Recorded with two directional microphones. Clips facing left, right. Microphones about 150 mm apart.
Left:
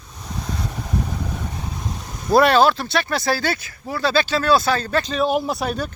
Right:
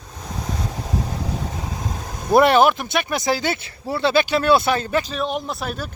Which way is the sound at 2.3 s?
20° right (ahead or behind).